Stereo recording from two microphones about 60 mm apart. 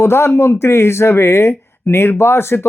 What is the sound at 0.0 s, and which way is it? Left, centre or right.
Speech, left.